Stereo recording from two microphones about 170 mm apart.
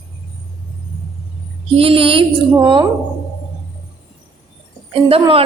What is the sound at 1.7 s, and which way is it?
Speech, 35° right (ahead or behind).